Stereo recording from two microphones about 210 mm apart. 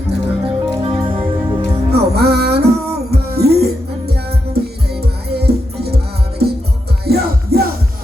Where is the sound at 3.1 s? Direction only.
50° right (ahead or behind).